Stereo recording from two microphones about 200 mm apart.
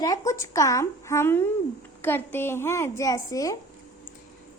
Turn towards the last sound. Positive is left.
turn(degrees=15)  # may be behind; listen again after turning